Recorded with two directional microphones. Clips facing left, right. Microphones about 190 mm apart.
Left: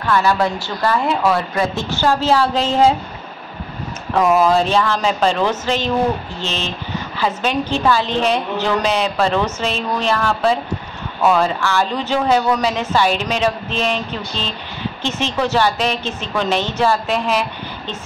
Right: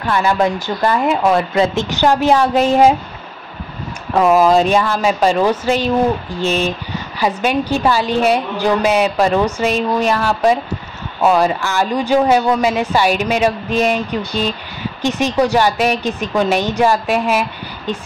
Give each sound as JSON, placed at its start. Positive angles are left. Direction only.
{"t": 0.1, "sound": "a woman's voice", "side_deg": -20}
{"t": 4.1, "sound": "a woman's voice", "side_deg": -10}